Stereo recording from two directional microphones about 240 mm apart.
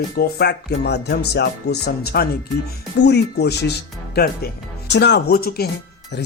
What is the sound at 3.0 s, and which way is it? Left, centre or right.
Speech, left.